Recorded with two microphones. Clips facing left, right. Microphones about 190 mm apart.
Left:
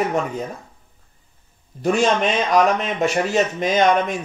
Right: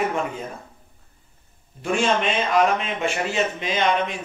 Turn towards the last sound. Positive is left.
turn(degrees=45)  # may be behind; listen again after turning